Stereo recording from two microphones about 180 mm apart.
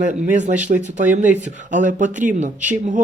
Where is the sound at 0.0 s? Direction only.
45° right (ahead or behind).